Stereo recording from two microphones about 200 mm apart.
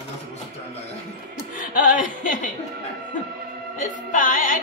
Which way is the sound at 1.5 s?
40° left (ahead or behind).